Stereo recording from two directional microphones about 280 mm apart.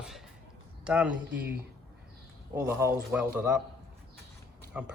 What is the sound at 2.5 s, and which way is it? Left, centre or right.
Speech, centre.